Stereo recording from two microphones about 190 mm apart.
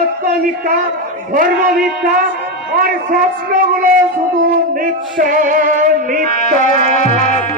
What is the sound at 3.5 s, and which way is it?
Music, 45° right (ahead or behind).